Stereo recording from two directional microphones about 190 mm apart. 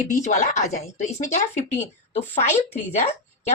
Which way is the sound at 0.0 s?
40° left (ahead or behind).